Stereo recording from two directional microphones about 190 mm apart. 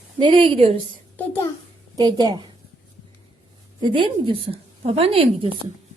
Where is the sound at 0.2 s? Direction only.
25° right (ahead or behind).